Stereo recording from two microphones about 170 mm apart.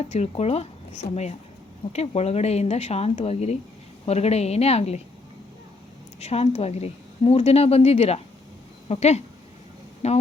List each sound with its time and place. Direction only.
0.0 s a woman's voice: 40° left (ahead or behind)
6.1 s a woman's voice: 40° left (ahead or behind)